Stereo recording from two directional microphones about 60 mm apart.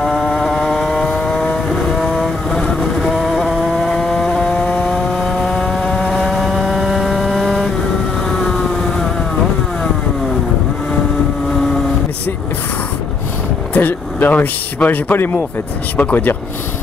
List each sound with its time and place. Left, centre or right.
0.0 s vehicle: centre
0.5 s vehicle: centre
3.5 s chainsaw: centre
8.3 s vehicle: centre
13.7 s speech: left